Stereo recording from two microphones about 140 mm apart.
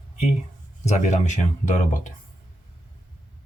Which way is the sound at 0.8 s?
60° left (ahead or behind).